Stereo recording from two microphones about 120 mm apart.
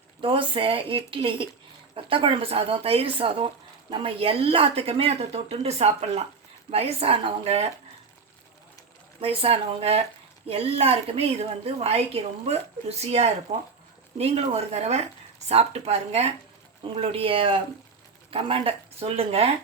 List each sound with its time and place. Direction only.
0.2 s a woman's voice: 45° right (ahead or behind)
9.2 s a woman's voice: 55° right (ahead or behind)
16.9 s speech: 50° right (ahead or behind)